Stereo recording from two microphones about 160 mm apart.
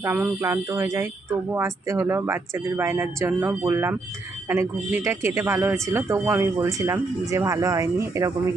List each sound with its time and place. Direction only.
0.0 s speech: 15° right (ahead or behind)